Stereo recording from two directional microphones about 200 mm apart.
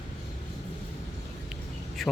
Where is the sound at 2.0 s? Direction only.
Centre (ahead or behind).